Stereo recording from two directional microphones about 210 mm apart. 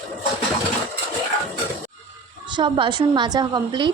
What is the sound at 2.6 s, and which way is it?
A woman's voice, 25° right (ahead or behind).